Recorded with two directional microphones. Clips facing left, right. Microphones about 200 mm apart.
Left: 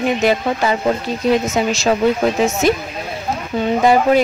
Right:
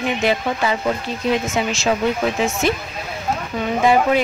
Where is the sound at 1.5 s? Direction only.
40° left (ahead or behind).